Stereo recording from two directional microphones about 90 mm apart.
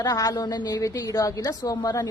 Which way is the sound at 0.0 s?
40° left (ahead or behind).